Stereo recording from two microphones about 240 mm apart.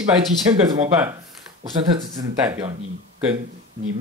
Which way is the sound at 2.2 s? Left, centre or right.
Centre.